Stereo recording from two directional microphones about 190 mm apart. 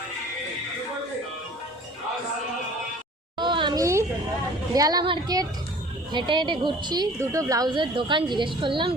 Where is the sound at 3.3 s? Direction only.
25° right (ahead or behind).